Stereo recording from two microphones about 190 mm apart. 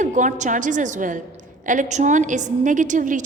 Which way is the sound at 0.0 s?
40° right (ahead or behind).